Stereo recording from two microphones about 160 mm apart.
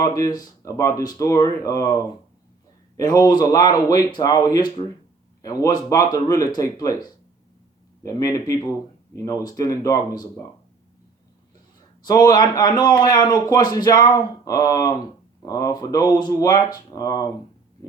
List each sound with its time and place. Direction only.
0.0 s a man's voice: 20° left (ahead or behind)
12.0 s a man's voice: 25° left (ahead or behind)